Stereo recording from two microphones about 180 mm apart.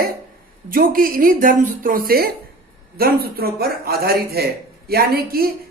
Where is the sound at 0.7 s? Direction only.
55° right (ahead or behind).